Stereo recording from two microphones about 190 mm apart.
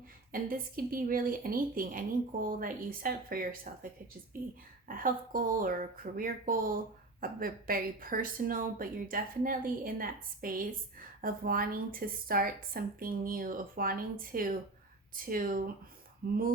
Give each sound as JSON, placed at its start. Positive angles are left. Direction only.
{"t": 0.3, "sound": "speech", "side_deg": -50}